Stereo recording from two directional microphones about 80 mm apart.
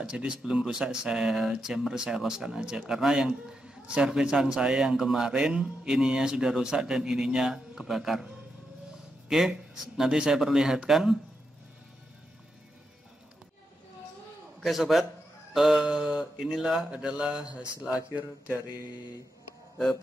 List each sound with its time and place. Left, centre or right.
0.0 s a man's voice: centre
14.6 s a man's voice: centre